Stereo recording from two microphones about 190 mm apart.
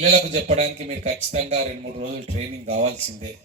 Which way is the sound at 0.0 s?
40° right (ahead or behind).